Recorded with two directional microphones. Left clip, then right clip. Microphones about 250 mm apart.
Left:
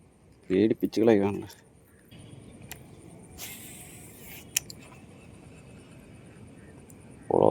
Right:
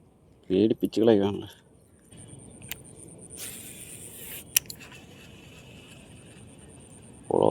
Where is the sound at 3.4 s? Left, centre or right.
Centre.